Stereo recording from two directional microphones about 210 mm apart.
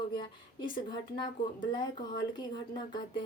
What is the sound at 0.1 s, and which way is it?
A woman's voice, 20° left (ahead or behind).